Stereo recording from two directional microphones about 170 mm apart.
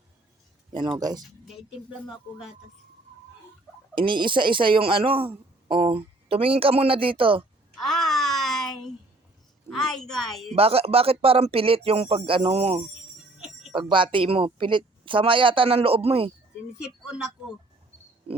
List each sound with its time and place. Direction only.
0.7 s speech: 25° right (ahead or behind)
3.9 s speech: 30° right (ahead or behind)
7.8 s a sound: centre (ahead or behind)
9.6 s a woman's voice: centre (ahead or behind)
10.5 s speech: 35° right (ahead or behind)
16.7 s a woman's voice: 5° right (ahead or behind)